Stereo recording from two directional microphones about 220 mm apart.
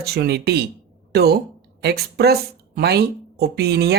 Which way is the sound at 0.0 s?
45° right (ahead or behind).